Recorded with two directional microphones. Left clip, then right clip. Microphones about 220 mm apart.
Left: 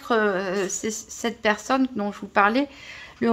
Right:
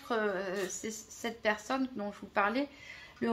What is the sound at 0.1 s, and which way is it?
Speech, 40° left (ahead or behind).